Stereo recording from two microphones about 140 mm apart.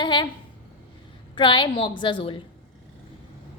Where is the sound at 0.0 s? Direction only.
35° left (ahead or behind).